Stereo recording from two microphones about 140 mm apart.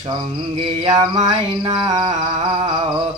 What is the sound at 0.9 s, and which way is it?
Male singing, 30° right (ahead or behind).